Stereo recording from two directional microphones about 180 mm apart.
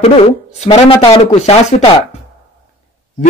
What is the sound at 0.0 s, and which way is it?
Speech, 40° left (ahead or behind).